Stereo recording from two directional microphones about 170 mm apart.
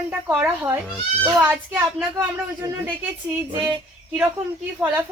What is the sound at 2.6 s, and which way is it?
Speech, 25° right (ahead or behind).